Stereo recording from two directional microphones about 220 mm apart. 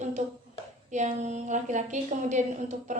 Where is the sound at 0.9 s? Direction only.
35° right (ahead or behind).